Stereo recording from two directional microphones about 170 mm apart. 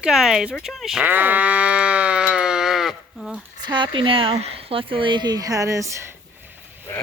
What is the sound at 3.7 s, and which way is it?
Speech, 30° right (ahead or behind).